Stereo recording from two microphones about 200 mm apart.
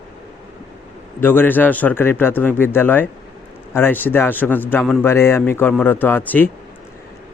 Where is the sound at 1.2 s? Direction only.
10° left (ahead or behind).